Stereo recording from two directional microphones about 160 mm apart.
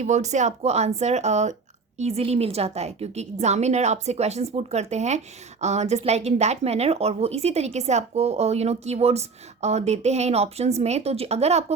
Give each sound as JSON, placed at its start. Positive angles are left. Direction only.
{"t": 0.0, "sound": "a woman's voice", "side_deg": -45}